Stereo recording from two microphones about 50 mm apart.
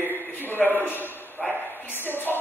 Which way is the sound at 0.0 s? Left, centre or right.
Left.